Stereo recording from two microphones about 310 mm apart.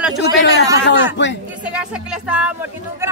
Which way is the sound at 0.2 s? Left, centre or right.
Left.